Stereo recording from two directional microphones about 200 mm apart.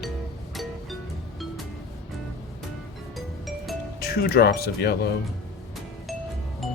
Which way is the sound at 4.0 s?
50° left (ahead or behind).